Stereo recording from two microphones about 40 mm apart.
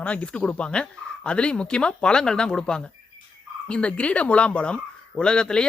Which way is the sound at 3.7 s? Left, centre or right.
Left.